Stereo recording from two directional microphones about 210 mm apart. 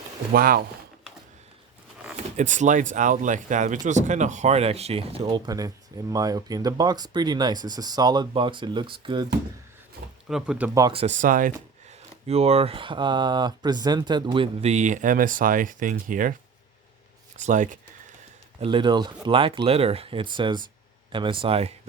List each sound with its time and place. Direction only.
0.3 s speech: 45° right (ahead or behind)
2.3 s speech: 35° right (ahead or behind)
10.2 s speech: centre (ahead or behind)
10.8 s speech: 20° right (ahead or behind)
11.0 s speech: 35° right (ahead or behind)
12.3 s speech: 30° right (ahead or behind)
17.3 s speech: 35° right (ahead or behind)
18.6 s speech: 25° right (ahead or behind)